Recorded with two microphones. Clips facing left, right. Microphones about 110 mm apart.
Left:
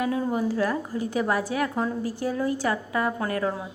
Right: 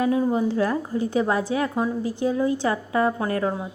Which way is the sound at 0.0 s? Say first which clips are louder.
Right 4 dB; 20° right (ahead or behind).